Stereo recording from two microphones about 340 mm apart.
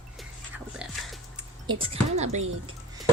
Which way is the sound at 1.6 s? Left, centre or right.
Centre.